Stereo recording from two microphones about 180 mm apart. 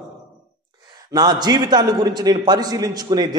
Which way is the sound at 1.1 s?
25° right (ahead or behind).